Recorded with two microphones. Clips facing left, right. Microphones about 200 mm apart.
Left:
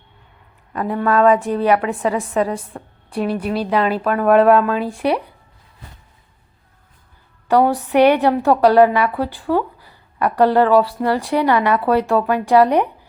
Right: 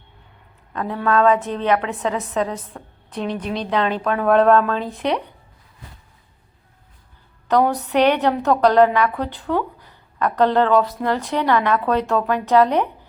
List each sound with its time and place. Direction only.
0.7 s a woman's voice: 10° left (ahead or behind)
7.4 s a sound: 10° left (ahead or behind)
7.9 s a woman's voice: 10° left (ahead or behind)